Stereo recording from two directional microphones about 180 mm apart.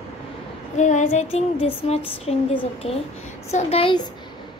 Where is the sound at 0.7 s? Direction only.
40° left (ahead or behind).